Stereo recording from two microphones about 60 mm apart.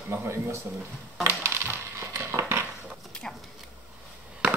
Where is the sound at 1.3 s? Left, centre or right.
Right.